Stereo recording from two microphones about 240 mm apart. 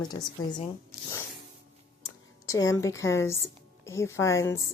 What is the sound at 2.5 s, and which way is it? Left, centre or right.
A woman's voice, centre.